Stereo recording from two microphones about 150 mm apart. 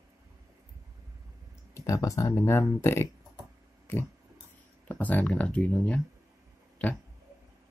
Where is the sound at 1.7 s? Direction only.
20° left (ahead or behind).